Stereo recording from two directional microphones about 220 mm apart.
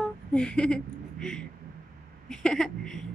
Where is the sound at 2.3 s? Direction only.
5° left (ahead or behind).